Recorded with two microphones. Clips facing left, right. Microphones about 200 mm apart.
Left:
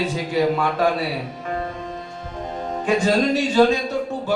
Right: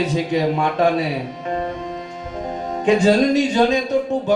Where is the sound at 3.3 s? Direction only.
15° right (ahead or behind).